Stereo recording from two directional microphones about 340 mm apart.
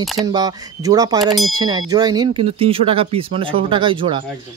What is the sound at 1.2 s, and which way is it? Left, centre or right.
Speech, centre.